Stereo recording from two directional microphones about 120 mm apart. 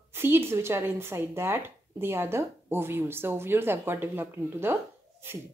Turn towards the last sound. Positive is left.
turn(degrees=-20)  # may be behind; listen again after turning